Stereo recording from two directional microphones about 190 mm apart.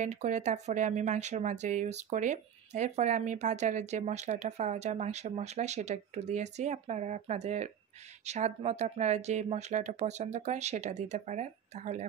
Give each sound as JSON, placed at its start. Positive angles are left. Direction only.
{"t": 0.0, "sound": "speech", "side_deg": -40}